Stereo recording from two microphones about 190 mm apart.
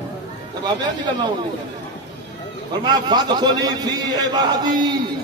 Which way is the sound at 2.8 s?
20° right (ahead or behind).